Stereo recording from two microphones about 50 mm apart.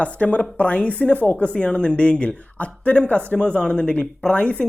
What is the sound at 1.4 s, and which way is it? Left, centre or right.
Speech, left.